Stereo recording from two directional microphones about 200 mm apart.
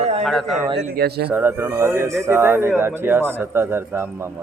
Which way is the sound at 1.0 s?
55° right (ahead or behind).